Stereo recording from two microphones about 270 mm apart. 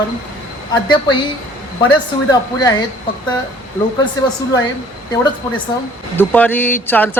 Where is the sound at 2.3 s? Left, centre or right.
Centre.